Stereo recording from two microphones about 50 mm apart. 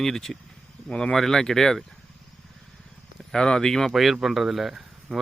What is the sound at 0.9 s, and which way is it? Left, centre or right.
Speech, left.